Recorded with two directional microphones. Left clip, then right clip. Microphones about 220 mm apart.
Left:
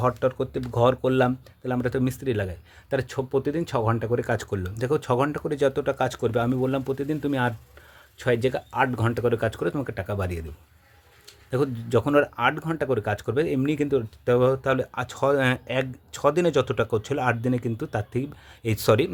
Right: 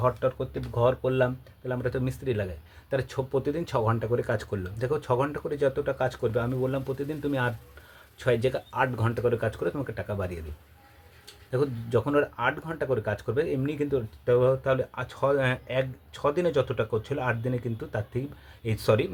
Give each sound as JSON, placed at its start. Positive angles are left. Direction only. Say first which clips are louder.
{"t": 0.0, "sound": "speech", "louder": "left 3 dB", "side_deg": 50}
{"t": 11.5, "sound": "speech", "louder": "left 3 dB", "side_deg": 45}